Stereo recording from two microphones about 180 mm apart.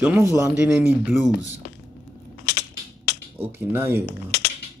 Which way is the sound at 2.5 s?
65° left (ahead or behind).